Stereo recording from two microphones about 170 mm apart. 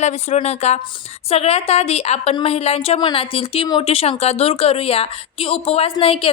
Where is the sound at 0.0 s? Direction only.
45° left (ahead or behind).